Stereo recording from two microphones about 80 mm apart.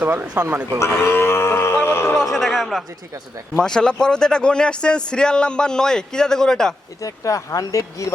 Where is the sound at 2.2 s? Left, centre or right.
Centre.